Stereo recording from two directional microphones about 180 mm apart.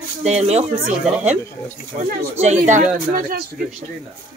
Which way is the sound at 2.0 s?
40° right (ahead or behind).